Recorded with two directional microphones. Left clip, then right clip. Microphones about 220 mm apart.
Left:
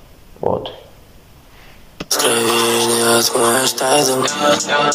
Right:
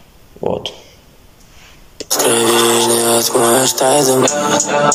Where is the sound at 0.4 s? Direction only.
10° right (ahead or behind).